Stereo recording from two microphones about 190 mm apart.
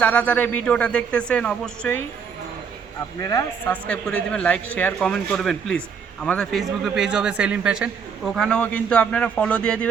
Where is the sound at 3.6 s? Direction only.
5° left (ahead or behind).